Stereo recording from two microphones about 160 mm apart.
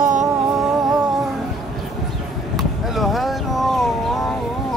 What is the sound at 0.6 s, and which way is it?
Humming, centre (ahead or behind).